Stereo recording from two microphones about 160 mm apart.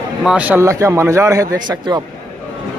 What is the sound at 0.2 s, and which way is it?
A man's voice, 5° right (ahead or behind).